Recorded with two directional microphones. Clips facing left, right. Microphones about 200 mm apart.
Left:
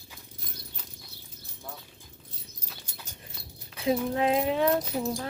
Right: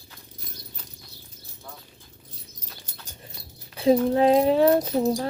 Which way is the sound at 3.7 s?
35° right (ahead or behind).